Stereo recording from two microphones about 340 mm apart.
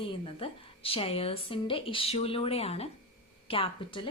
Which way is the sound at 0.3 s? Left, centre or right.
Centre.